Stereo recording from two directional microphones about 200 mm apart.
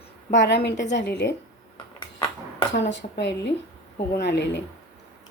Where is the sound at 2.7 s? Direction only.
60° left (ahead or behind).